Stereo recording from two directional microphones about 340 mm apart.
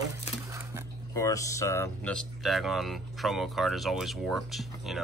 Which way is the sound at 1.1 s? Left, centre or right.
Centre.